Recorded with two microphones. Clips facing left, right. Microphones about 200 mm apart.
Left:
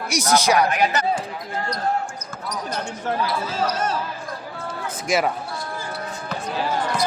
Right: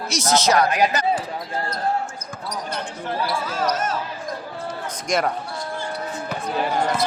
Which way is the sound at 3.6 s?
30° left (ahead or behind).